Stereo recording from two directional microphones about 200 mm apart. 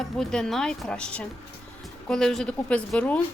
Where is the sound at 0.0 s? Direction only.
5° left (ahead or behind).